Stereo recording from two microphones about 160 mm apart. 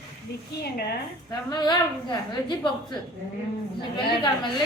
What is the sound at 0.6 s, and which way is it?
Speech, 90° left.